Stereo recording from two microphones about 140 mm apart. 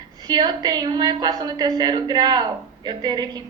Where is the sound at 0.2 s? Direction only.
30° right (ahead or behind).